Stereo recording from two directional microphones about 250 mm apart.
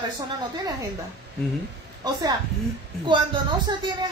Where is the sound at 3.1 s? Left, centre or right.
Centre.